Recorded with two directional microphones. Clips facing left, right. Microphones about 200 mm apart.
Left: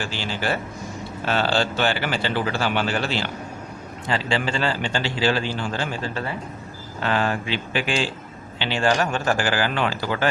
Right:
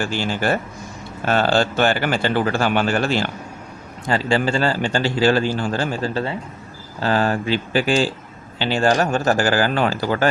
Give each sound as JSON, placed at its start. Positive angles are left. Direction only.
{"t": 0.0, "sound": "a man's voice", "side_deg": -50}